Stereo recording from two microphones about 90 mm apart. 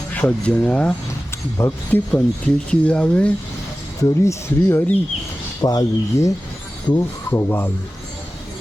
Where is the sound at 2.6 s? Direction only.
10° left (ahead or behind).